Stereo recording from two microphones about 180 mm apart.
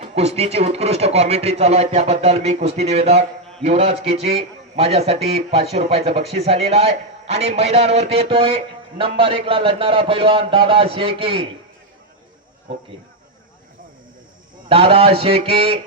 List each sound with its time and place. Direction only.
0.0 s speech: 35° right (ahead or behind)
14.7 s speech: 30° right (ahead or behind)